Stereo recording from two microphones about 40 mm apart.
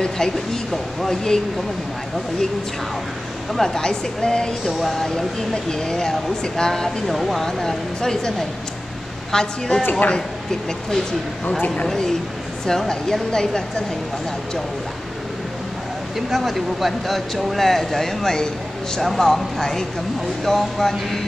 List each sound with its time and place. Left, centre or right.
1.0 s speech: centre
3.5 s speech: centre
4.7 s speech: centre
7.4 s speech: centre
11.6 s speech: left
12.6 s speech: centre
16.2 s speech: centre